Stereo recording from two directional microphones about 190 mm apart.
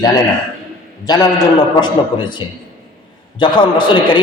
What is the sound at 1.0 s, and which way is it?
A man's voice, 20° left (ahead or behind).